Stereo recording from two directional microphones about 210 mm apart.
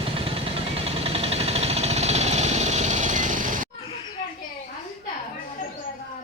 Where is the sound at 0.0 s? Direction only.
25° right (ahead or behind).